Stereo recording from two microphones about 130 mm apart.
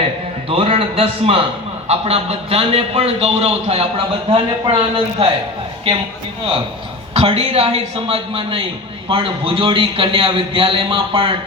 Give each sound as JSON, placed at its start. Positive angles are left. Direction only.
{"t": 0.5, "sound": "a man's voice", "side_deg": -50}
{"t": 7.1, "sound": "a man's voice", "side_deg": -50}